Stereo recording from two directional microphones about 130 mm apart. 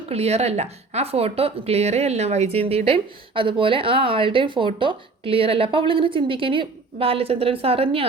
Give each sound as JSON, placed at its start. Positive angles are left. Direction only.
{"t": 0.1, "sound": "speech", "side_deg": -55}